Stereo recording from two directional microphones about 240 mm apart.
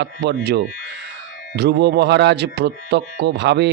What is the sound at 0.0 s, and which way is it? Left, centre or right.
Speech, right.